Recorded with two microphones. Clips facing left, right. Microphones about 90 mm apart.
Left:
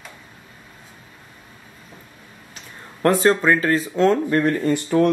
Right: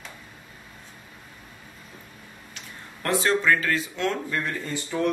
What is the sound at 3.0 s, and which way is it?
Speech, 45° left (ahead or behind).